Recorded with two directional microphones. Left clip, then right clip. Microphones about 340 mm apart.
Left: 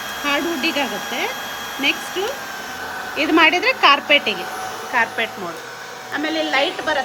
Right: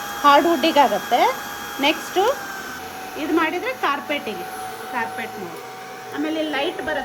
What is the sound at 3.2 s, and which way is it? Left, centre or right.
A woman's voice, centre.